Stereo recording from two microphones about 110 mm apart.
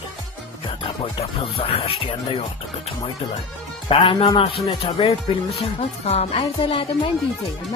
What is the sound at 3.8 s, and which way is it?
Speech, 45° left (ahead or behind).